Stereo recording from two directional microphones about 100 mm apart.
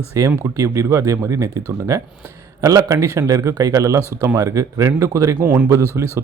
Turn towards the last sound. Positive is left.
turn(degrees=-30)  # may be behind; listen again after turning